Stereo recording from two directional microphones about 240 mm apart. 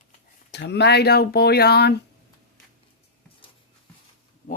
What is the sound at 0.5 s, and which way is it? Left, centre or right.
Speech, left.